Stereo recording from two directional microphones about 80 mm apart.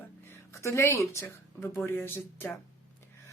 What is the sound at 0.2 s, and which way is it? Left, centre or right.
Speech, left.